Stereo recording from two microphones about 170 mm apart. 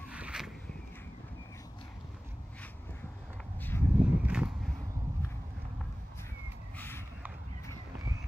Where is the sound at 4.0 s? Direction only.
5° right (ahead or behind).